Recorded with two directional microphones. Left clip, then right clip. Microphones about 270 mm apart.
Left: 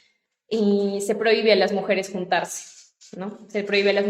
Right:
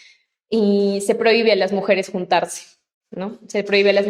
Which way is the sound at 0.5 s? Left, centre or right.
Right.